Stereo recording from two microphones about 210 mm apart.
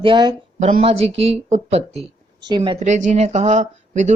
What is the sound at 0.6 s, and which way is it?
Speech, 35° right (ahead or behind).